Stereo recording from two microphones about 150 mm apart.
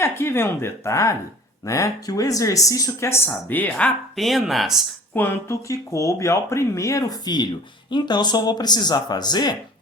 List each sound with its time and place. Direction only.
0.0 s speech: 15° left (ahead or behind); by 4.8 s centre (ahead or behind)
5.1 s speech: 15° left (ahead or behind)